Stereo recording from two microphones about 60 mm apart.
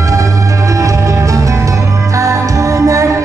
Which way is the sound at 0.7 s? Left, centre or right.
Right.